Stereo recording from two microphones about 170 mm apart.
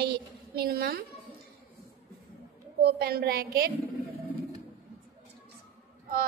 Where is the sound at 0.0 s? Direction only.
70° right (ahead or behind).